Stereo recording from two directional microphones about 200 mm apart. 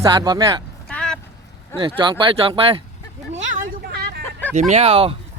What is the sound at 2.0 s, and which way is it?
Speech, 25° right (ahead or behind).